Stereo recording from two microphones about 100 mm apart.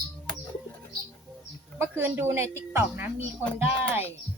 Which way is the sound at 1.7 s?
25° right (ahead or behind).